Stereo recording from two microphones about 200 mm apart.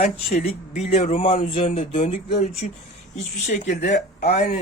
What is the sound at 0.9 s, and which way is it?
Speech, 35° left (ahead or behind).